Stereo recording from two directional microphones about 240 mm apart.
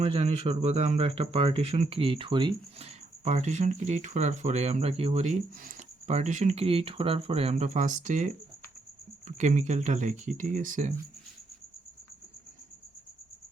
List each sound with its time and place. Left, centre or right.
0.0 s speech: right